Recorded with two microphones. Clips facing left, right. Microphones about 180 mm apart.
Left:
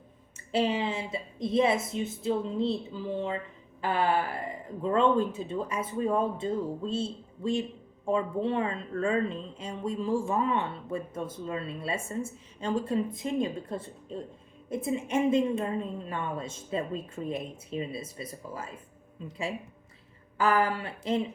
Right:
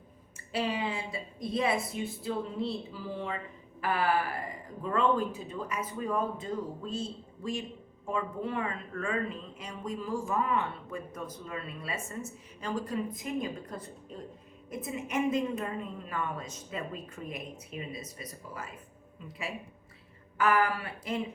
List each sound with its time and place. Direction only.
0.3 s speech: 25° left (ahead or behind)
20.4 s speech: 30° left (ahead or behind)